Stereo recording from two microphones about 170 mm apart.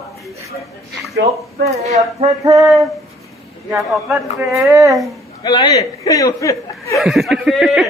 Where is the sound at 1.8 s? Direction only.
40° right (ahead or behind).